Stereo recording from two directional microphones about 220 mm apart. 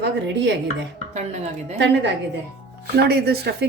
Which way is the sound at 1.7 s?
50° right (ahead or behind).